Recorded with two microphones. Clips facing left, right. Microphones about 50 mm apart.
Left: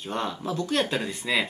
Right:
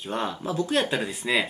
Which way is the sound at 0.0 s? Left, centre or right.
Centre.